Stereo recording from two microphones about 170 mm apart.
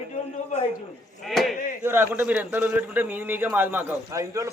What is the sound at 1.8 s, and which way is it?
A man's voice, 15° right (ahead or behind).